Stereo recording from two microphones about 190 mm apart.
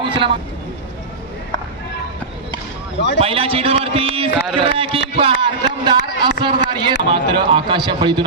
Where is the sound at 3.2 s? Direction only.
30° right (ahead or behind).